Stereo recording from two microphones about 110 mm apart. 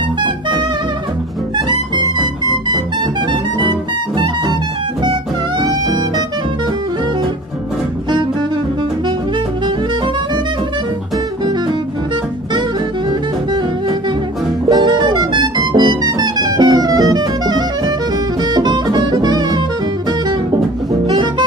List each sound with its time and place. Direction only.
0.2 s music: 45° right (ahead or behind)
2.7 s music: 40° right (ahead or behind)
5.6 s music: 40° right (ahead or behind)
14.7 s music: 40° right (ahead or behind)
21.1 s music: 45° right (ahead or behind)